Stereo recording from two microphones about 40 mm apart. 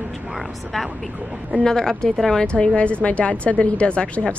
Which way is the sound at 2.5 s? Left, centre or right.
Left.